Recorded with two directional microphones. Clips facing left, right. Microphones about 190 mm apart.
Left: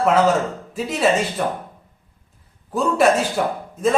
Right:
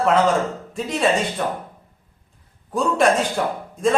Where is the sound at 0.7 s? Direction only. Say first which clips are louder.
Left 1 dB; 5° left (ahead or behind).